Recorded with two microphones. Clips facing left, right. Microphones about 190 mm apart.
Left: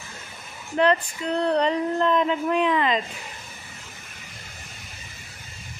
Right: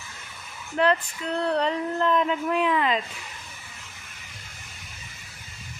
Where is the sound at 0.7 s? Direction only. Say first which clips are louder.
Left 2 dB; centre (ahead or behind).